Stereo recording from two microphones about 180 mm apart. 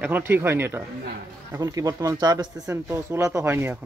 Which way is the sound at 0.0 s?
10° right (ahead or behind).